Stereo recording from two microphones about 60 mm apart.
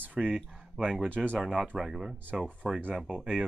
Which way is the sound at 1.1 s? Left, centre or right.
Right.